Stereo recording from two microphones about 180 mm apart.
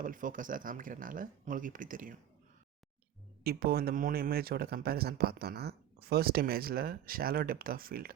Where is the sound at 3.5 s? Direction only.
55° right (ahead or behind).